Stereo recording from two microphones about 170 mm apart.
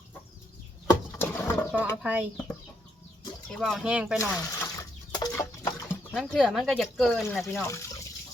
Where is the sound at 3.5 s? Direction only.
Centre (ahead or behind).